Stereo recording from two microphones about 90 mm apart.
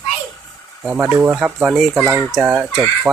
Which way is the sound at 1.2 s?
20° right (ahead or behind).